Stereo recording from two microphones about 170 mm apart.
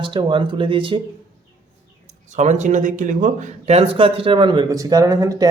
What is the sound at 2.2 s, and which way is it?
A man's voice, 45° right (ahead or behind).